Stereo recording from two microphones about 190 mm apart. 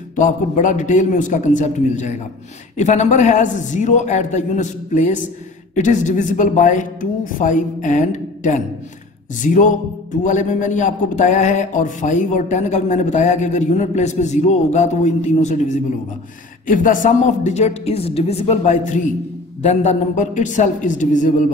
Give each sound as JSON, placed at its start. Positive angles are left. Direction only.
{"t": 0.1, "sound": "speech", "side_deg": 40}